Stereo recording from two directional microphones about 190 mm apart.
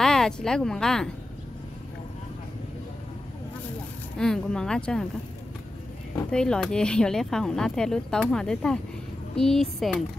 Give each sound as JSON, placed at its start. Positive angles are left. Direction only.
{"t": 0.0, "sound": "a woman's voice", "side_deg": 5}
{"t": 4.2, "sound": "speech", "side_deg": 5}
{"t": 6.3, "sound": "speech", "side_deg": 5}